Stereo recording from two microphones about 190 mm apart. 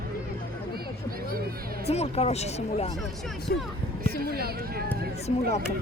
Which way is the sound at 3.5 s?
55° left (ahead or behind).